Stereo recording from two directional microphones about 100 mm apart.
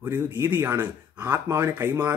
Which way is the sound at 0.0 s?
20° right (ahead or behind).